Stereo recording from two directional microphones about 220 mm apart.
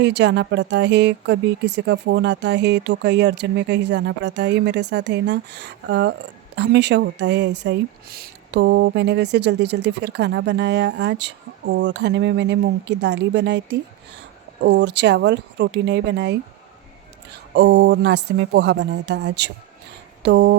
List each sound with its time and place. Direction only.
0.0 s speech: 50° right (ahead or behind)